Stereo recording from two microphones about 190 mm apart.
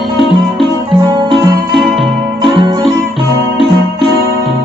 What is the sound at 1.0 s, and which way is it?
Music, 20° right (ahead or behind).